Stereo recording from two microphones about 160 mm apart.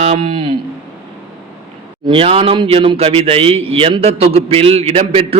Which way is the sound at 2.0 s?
35° right (ahead or behind).